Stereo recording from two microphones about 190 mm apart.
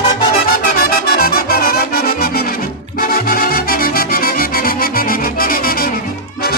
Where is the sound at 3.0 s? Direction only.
50° left (ahead or behind).